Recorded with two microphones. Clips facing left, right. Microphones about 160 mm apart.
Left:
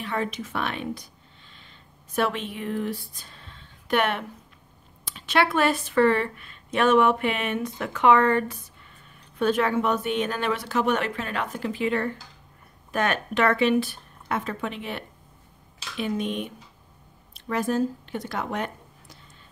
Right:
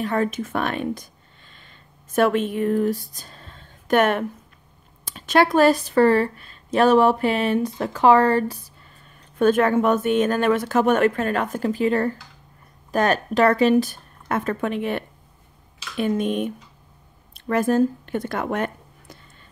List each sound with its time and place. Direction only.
0.0 s speech: 45° right (ahead or behind)
1.5 s a sound: 50° right (ahead or behind)
5.0 s speech: 40° right (ahead or behind)
9.4 s speech: 50° right (ahead or behind)